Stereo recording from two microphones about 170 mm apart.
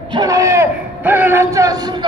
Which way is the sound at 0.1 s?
20° right (ahead or behind).